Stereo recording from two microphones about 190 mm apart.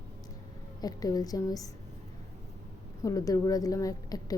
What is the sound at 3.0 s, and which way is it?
A woman's voice, 15° left (ahead or behind).